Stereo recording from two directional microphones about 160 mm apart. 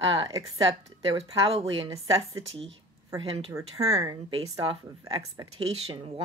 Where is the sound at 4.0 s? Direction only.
30° right (ahead or behind).